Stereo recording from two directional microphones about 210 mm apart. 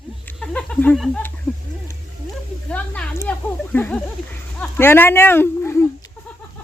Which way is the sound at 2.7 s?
5° left (ahead or behind).